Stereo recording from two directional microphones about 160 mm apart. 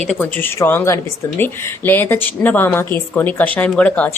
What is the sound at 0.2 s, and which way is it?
A woman's voice, 10° left (ahead or behind).